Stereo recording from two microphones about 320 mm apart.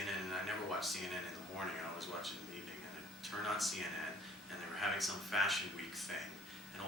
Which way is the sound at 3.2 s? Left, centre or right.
Centre.